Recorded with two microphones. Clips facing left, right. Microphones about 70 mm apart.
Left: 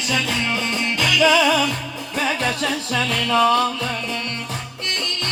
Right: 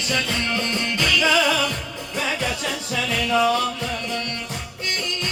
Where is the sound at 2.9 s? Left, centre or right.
Left.